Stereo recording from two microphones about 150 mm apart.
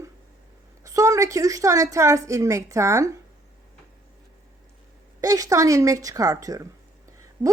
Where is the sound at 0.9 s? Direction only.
20° right (ahead or behind).